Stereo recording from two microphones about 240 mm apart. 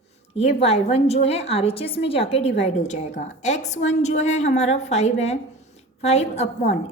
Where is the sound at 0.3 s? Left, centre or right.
Left.